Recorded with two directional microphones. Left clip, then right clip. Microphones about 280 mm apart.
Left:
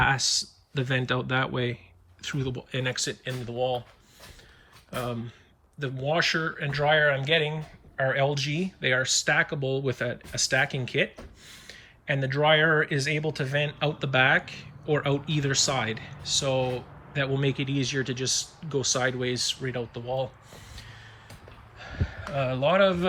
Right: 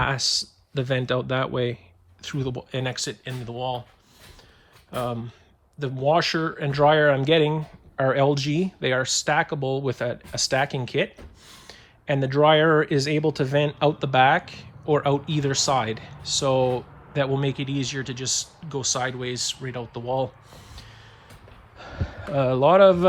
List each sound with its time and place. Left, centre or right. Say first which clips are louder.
0.0 s speech: even; centre
4.9 s speech: right 4 dB; centre
20.5 s a sound: right 1 dB; centre
21.8 s speech: right 2 dB; centre